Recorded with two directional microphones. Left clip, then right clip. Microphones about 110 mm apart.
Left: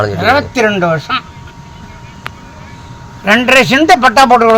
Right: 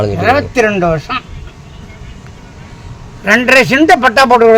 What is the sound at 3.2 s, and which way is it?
A man's voice, 10° right (ahead or behind).